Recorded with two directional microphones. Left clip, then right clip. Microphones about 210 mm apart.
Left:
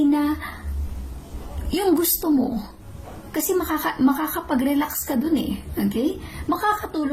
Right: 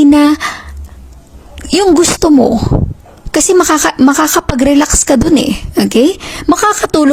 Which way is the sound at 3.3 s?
45° right (ahead or behind).